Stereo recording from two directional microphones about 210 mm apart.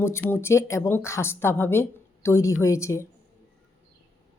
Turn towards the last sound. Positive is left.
turn(degrees=15)  # may be behind; listen again after turning